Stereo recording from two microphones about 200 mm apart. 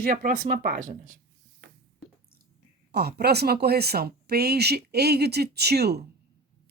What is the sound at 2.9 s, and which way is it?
Speech, 55° right (ahead or behind).